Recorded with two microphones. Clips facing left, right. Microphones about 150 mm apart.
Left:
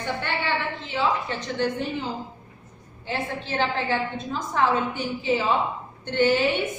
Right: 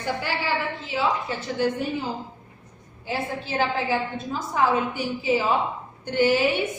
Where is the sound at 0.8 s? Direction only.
5° right (ahead or behind).